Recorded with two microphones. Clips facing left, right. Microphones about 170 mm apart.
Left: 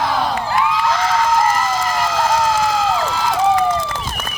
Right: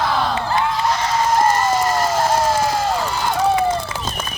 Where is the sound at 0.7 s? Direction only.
90° left.